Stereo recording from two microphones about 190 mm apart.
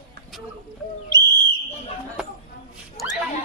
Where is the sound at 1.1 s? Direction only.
20° right (ahead or behind).